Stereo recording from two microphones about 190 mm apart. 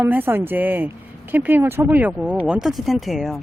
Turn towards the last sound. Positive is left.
turn(degrees=0)  # may be behind; listen again after turning